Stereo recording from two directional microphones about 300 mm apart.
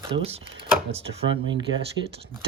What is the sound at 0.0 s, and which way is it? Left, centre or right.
Speech, centre.